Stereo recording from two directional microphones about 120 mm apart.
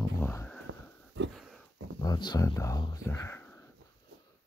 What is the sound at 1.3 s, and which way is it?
Dog, 5° right (ahead or behind).